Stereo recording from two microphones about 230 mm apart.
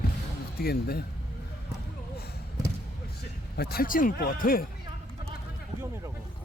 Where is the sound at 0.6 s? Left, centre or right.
Left.